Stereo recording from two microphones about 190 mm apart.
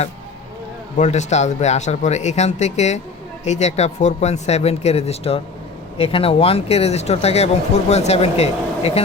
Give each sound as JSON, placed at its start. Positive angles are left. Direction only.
{"t": 0.9, "sound": "speech", "side_deg": 40}